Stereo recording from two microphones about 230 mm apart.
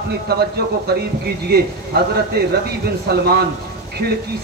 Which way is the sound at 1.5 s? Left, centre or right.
Right.